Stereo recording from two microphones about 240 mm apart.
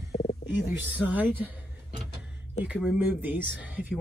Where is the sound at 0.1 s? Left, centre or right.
Left.